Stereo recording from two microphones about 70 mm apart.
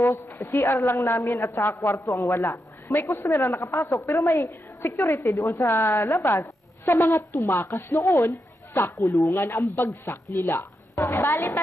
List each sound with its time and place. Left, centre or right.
0.5 s a man's voice: left
5.7 s a woman's voice: left
9.3 s a man's voice: left